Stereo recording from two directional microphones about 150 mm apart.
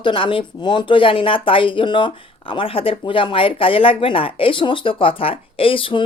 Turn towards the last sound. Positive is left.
turn(degrees=35)  # may be behind; listen again after turning